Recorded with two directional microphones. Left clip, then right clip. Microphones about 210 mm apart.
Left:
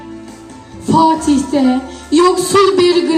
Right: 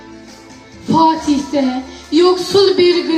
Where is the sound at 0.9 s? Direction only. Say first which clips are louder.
Left 1 dB; 50° left (ahead or behind).